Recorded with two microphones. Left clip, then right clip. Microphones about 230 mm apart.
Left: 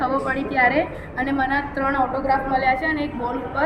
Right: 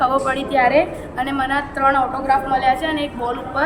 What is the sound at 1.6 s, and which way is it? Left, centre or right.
Speech, right.